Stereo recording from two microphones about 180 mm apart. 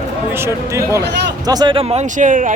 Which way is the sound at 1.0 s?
70° right (ahead or behind).